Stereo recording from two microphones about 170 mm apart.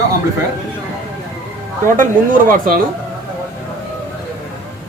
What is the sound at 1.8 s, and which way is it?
Speech, 55° right (ahead or behind).